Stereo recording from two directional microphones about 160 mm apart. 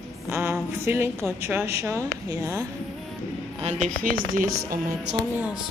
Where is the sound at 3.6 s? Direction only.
50° right (ahead or behind).